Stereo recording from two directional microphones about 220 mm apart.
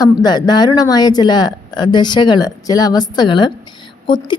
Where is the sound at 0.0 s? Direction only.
20° left (ahead or behind).